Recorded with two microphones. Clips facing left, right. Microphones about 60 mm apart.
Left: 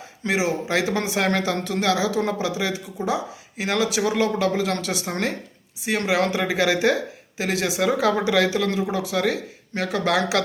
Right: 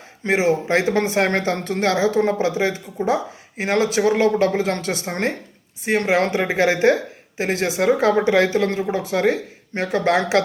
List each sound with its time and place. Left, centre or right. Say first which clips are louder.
0.3 s speech: right 5 dB; right